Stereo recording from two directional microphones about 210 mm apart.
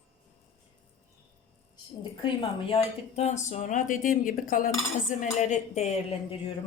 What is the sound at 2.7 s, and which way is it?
Speech, 30° left (ahead or behind).